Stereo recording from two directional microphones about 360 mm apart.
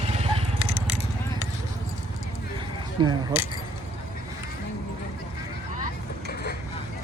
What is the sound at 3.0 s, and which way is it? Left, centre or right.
Speech, centre.